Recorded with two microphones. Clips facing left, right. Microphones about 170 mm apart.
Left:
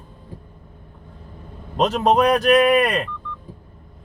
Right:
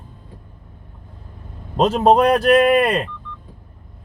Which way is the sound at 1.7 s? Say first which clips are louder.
Right 3 dB; 35° right (ahead or behind).